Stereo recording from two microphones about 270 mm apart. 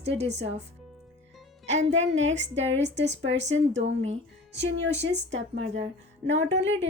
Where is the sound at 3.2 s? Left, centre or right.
Right.